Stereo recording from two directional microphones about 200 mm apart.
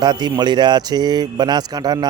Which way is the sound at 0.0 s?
20° right (ahead or behind).